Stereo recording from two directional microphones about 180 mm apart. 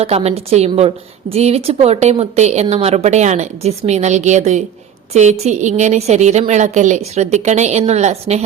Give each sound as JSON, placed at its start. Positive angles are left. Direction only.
{"t": 0.0, "sound": "a woman's voice", "side_deg": -35}